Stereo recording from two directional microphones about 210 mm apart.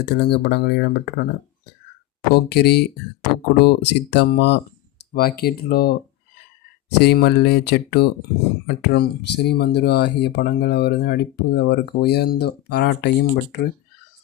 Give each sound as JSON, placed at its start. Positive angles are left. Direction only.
{"t": 0.0, "sound": "speech", "side_deg": 50}
{"t": 2.3, "sound": "speech", "side_deg": 50}
{"t": 7.0, "sound": "speech", "side_deg": 50}